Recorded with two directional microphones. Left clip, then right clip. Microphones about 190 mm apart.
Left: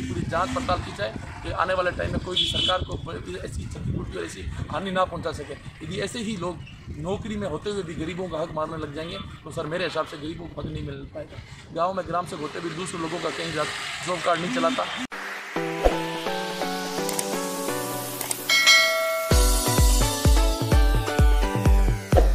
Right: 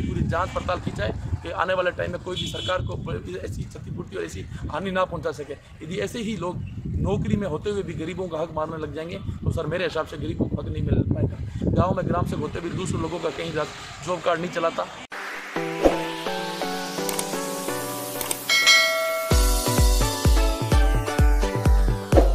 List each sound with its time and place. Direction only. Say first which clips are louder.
0.3 s speech: left 1 dB; 20° right (ahead or behind)
4.7 s speech: even; 20° right (ahead or behind)
9.6 s speech: right 1 dB; 20° right (ahead or behind)
11.7 s speech: right 1 dB; 15° right (ahead or behind)
13.6 s speech: left 2 dB; 20° right (ahead or behind)
15.5 s music: right 2 dB; centre (ahead or behind)
18.5 s church bell: even; centre (ahead or behind)
19.5 s music: even; centre (ahead or behind)